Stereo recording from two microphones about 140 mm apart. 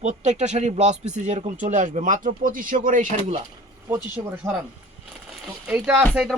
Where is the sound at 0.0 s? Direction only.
55° right (ahead or behind).